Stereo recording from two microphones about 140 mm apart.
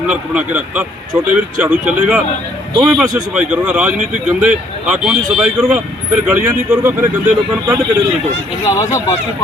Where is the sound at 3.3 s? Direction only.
10° right (ahead or behind).